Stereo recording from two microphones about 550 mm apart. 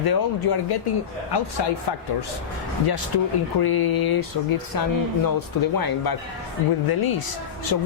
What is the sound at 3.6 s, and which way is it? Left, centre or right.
Speech, left.